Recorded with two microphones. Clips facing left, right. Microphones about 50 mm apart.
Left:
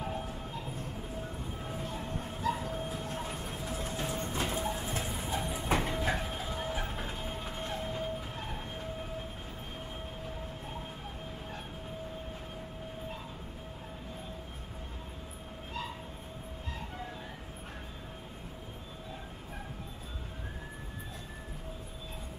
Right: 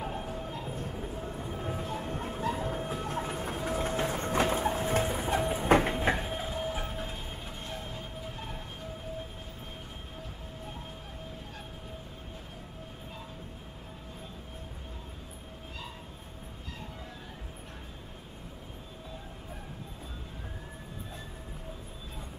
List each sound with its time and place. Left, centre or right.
0.0 s train: centre
0.7 s music: centre
2.0 s a sound: right
4.5 s clip-clop: right
5.4 s train: right
5.9 s train: right
6.8 s music: centre